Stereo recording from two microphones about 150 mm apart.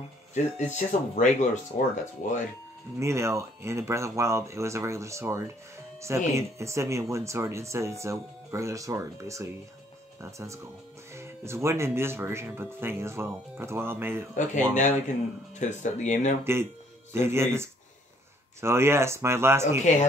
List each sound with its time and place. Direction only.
0.7 s speech: 55° left (ahead or behind)
3.0 s speech: 20° right (ahead or behind)
14.3 s speech: 55° left (ahead or behind)
17.1 s speech: 15° right (ahead or behind)
19.9 s speech: 55° left (ahead or behind)